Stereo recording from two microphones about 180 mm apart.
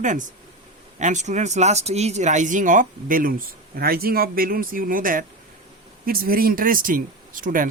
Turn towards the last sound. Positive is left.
turn(degrees=-50)  # may be behind; listen again after turning